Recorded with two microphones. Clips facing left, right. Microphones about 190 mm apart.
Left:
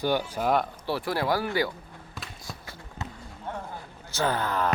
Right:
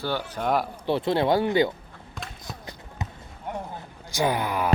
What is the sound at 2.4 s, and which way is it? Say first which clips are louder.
Basketball bounce: right 2 dB; 20° right (ahead or behind).